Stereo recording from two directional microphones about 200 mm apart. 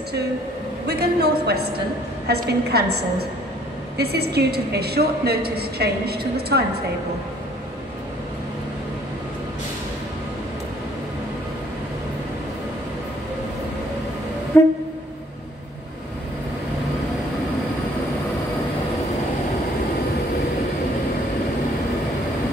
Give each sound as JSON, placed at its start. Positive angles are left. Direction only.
{"t": 0.8, "sound": "a woman's voice", "side_deg": -55}
{"t": 14.5, "sound": "train", "side_deg": 10}